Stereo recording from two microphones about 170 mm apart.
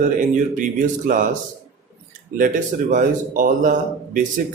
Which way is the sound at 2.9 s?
50° right (ahead or behind).